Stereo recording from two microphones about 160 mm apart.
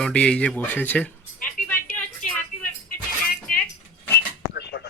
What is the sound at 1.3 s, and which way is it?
Music, 60° left (ahead or behind).